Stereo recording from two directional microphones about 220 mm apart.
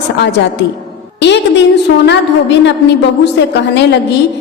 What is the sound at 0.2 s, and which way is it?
Speech, 50° left (ahead or behind).